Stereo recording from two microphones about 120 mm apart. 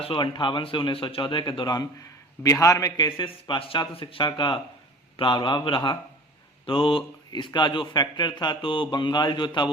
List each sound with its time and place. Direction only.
0.0 s a man's voice: 45° left (ahead or behind)
3.2 s speech: 40° left (ahead or behind)